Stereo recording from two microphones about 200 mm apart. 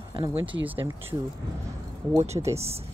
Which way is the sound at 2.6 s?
30° right (ahead or behind).